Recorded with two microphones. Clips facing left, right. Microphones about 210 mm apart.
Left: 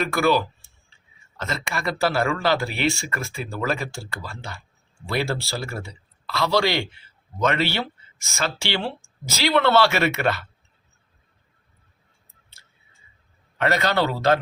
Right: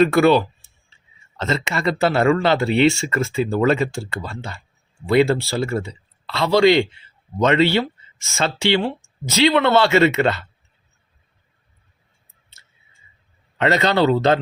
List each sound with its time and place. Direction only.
0.1 s speech: 25° right (ahead or behind)
1.4 s speech: 25° right (ahead or behind)
13.6 s speech: 25° right (ahead or behind)